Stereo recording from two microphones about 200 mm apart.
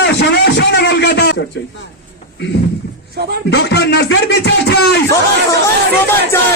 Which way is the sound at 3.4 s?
55° left (ahead or behind).